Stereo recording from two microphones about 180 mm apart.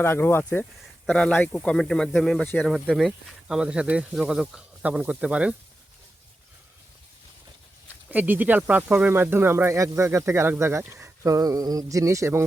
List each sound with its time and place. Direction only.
0.0 s speech: 15° left (ahead or behind); by 5.5 s 5° right (ahead or behind)
8.1 s speech: 10° right (ahead or behind)